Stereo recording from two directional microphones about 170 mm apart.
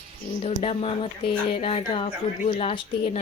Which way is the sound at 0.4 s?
35° left (ahead or behind).